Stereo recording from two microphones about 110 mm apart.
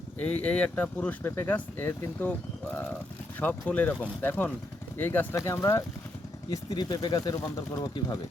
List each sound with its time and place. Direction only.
0.2 s speech: 10° left (ahead or behind)
3.4 s speech: 15° left (ahead or behind)
6.5 s speech: 35° left (ahead or behind)